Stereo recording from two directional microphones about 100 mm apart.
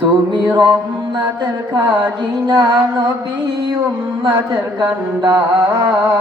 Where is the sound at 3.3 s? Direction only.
45° right (ahead or behind).